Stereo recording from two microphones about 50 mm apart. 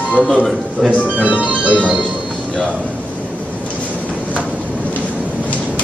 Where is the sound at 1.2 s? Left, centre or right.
Right.